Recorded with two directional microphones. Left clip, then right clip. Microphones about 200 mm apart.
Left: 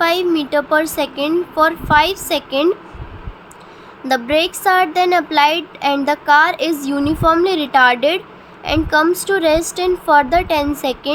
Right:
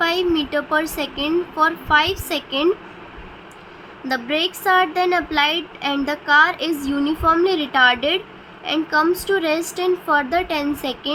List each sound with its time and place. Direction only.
0.0 s speech: 15° left (ahead or behind)
4.0 s speech: 20° left (ahead or behind)